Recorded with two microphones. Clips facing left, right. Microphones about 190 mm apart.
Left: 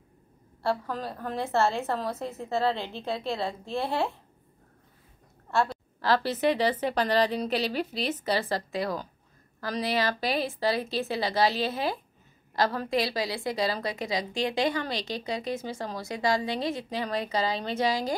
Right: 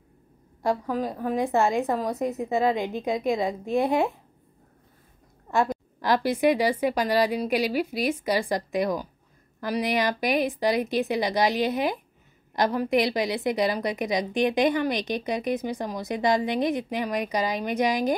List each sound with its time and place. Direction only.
0.6 s a woman's voice: 15° right (ahead or behind)
5.5 s a woman's voice: 15° right (ahead or behind)